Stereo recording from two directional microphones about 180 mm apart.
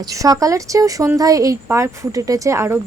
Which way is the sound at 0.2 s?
20° right (ahead or behind).